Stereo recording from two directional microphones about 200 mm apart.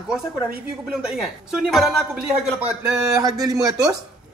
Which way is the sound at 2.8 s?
15° right (ahead or behind).